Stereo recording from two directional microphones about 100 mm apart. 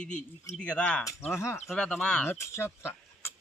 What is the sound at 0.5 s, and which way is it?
Speech, 10° left (ahead or behind).